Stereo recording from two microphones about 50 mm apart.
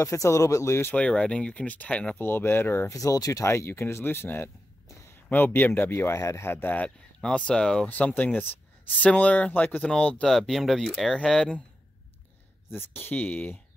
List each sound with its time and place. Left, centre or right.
0.0 s speech: left
0.9 s speech: left
2.1 s speech: left
2.9 s speech: left
5.9 s speech: left
7.2 s speech: centre
8.2 s speech: left
9.8 s speech: centre
10.2 s speech: centre
11.1 s speech: centre
12.7 s speech: left
13.1 s speech: left